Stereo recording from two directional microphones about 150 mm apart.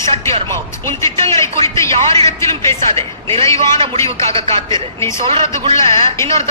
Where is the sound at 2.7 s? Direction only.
40° right (ahead or behind).